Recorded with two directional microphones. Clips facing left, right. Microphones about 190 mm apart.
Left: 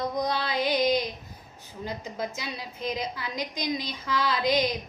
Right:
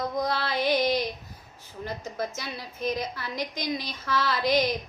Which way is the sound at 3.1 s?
15° left (ahead or behind).